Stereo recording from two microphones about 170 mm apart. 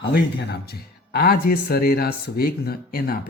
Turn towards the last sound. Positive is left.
turn(degrees=65)  # may be behind; listen again after turning